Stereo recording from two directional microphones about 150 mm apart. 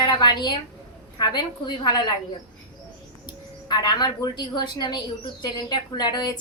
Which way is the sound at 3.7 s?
30° left (ahead or behind).